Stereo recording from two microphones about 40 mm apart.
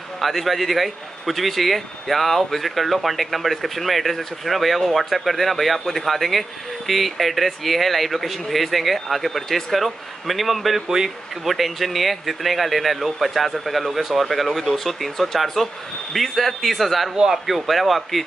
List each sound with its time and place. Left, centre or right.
0.2 s a man's voice: centre